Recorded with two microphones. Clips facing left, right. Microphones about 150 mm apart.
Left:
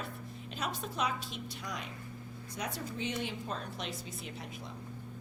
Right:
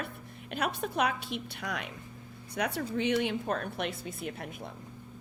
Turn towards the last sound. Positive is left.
turn(degrees=-55)  # may be behind; listen again after turning